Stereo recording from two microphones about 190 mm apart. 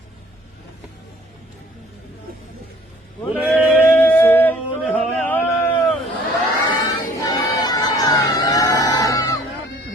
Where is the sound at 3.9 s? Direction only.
10° left (ahead or behind).